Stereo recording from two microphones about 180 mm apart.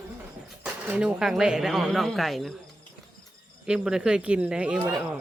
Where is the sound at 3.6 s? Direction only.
5° right (ahead or behind).